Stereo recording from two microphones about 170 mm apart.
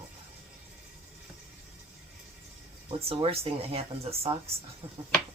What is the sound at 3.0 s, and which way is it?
Speech, 35° right (ahead or behind).